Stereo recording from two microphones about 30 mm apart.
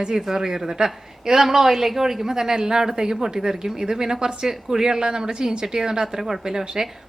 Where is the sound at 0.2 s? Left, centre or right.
Centre.